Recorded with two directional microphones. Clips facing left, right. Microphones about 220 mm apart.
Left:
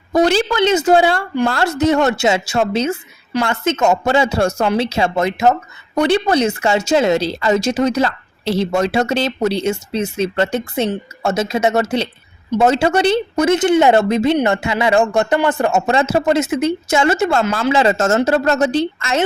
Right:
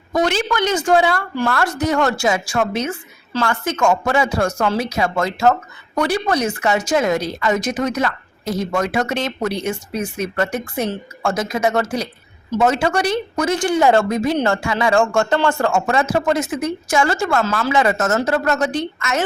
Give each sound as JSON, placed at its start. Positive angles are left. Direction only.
{"t": 0.1, "sound": "a woman's voice", "side_deg": 35}